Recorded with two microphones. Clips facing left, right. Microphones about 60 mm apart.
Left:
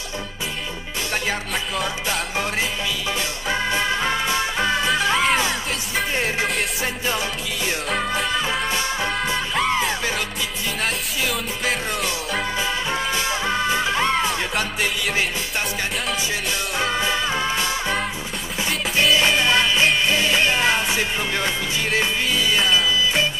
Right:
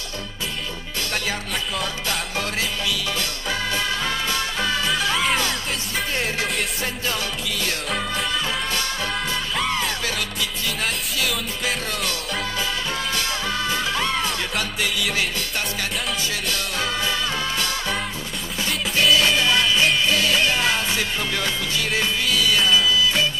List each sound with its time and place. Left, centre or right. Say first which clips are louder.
3.2 s music: left 2 dB; left
8.3 s music: left 2 dB; centre
12.4 s music: left 3 dB; centre
16.4 s music: left 3 dB; centre
19.1 s music: left 1 dB; centre